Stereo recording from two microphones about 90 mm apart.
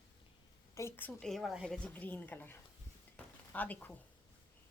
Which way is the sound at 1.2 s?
Centre (ahead or behind).